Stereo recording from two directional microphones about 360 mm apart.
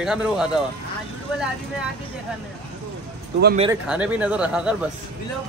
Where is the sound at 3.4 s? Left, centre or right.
Right.